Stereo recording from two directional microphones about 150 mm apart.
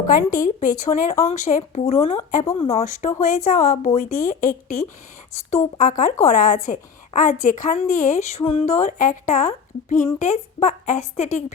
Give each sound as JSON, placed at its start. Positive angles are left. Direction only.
{"t": 0.2, "sound": "a woman's voice", "side_deg": 60}
{"t": 3.2, "sound": "a woman's voice", "side_deg": 55}